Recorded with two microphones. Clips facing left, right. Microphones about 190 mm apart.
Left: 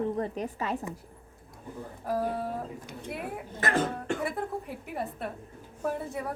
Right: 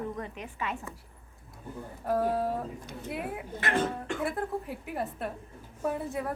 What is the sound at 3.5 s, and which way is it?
Speech, 40° left (ahead or behind).